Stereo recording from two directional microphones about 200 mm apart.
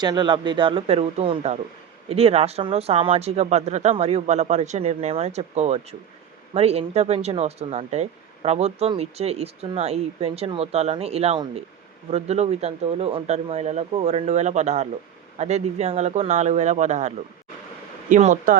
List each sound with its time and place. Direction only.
0.0 s speech: 20° right (ahead or behind); by 18.5 s 35° right (ahead or behind)